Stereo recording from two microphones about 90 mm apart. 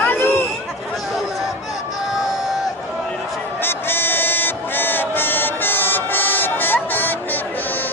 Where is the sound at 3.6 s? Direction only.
25° left (ahead or behind).